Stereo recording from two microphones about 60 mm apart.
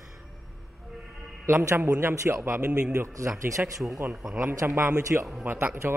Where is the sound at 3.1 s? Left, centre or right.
Right.